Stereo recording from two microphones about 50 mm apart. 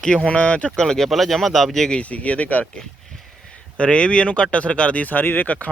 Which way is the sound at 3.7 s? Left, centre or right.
Left.